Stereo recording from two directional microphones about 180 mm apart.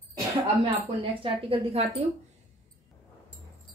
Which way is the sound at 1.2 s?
30° right (ahead or behind).